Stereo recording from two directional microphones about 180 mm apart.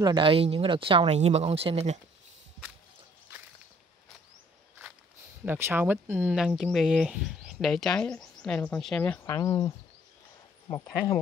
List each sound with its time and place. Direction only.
0.0 s speech: 25° right (ahead or behind)
5.4 s speech: 10° right (ahead or behind)
9.2 s speech: 20° left (ahead or behind)